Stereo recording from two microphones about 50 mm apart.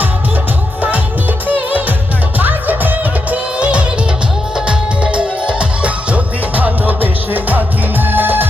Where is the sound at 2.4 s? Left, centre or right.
Right.